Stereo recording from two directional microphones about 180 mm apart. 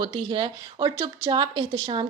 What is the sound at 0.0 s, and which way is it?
A woman's voice, 25° right (ahead or behind).